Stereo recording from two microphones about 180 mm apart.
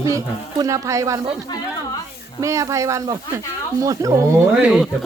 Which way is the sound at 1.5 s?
25° left (ahead or behind).